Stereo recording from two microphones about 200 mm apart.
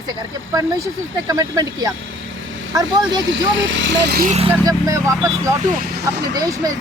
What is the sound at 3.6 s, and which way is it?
Speech, 65° right (ahead or behind).